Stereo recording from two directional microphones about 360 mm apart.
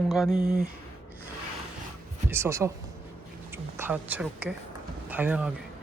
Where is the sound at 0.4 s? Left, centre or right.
Right.